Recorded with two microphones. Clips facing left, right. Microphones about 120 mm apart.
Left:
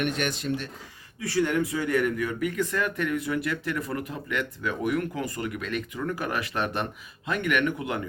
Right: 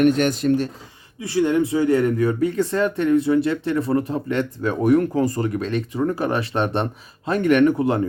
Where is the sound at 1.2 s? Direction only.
25° right (ahead or behind).